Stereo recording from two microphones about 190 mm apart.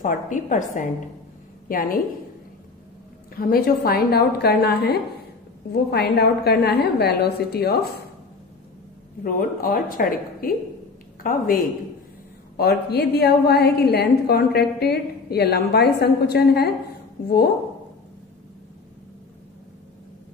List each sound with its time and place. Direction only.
0.0 s a woman's voice: 45° left (ahead or behind)
3.3 s a woman's voice: 50° left (ahead or behind)
9.2 s a woman's voice: 50° left (ahead or behind)